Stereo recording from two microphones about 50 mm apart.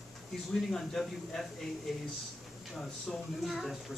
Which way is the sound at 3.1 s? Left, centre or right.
Centre.